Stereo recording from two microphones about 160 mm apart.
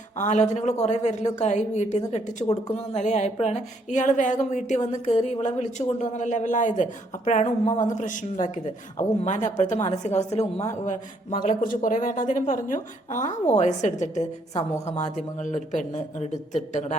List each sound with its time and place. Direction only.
0.2 s a woman's voice: 45° left (ahead or behind)